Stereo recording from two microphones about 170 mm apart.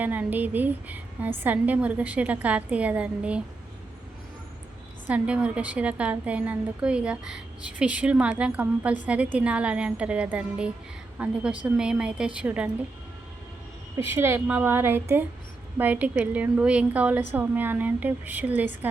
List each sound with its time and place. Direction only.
0.0 s a woman's voice: 10° right (ahead or behind)
5.0 s a woman's voice: 5° right (ahead or behind)
13.9 s a woman's voice: 15° right (ahead or behind)